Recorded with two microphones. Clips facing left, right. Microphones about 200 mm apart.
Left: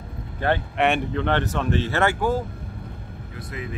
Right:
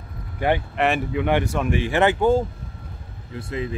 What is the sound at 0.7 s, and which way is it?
Speech, centre (ahead or behind).